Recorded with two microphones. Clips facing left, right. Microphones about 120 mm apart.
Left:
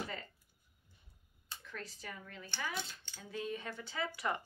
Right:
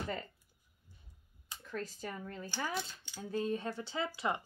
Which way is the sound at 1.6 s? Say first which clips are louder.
Right 8 dB; 40° right (ahead or behind).